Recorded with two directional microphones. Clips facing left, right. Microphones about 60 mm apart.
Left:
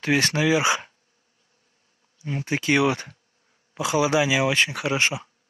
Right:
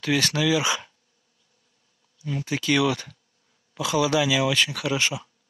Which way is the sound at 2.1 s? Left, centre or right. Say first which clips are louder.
Left 1 dB; left.